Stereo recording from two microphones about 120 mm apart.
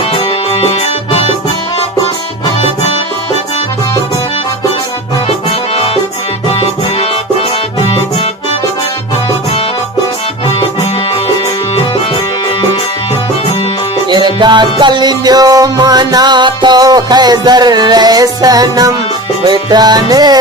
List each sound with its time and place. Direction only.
0.1 s music: 50° left (ahead or behind)
14.1 s music: 40° right (ahead or behind)